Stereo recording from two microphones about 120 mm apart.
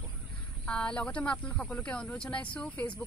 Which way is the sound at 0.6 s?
5° left (ahead or behind).